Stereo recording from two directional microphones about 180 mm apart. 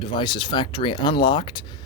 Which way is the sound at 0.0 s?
25° left (ahead or behind).